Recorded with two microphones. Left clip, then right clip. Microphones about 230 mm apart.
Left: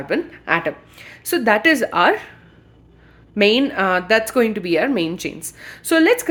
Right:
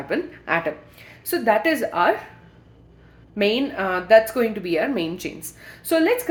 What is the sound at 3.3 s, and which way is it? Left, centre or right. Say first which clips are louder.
A woman's voice: left 6 dB; left.